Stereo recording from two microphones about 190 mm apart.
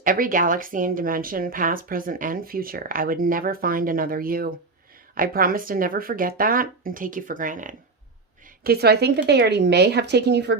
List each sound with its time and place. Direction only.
0.0 s a woman's voice: 45° right (ahead or behind)
8.6 s speech: 55° right (ahead or behind)